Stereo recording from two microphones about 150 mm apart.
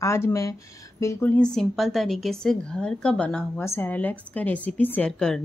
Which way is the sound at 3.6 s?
15° left (ahead or behind).